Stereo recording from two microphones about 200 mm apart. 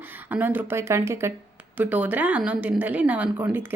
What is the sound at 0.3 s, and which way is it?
Speech, 10° right (ahead or behind).